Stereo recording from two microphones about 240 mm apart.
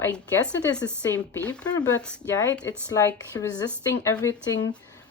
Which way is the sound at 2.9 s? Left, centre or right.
Centre.